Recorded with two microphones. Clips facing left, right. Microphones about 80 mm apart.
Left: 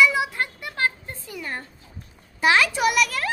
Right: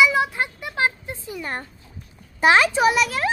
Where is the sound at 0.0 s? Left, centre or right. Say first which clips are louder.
Right 1 dB; centre.